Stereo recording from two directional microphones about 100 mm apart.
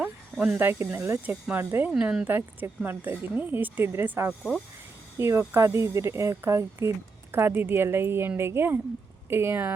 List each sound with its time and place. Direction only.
0.0 s speech: 15° right (ahead or behind)